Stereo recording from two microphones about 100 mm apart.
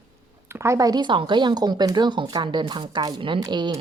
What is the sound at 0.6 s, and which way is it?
Speech, 30° right (ahead or behind).